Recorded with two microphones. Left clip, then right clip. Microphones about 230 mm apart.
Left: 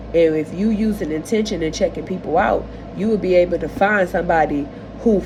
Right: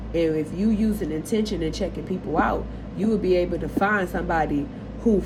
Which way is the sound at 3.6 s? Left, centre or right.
Left.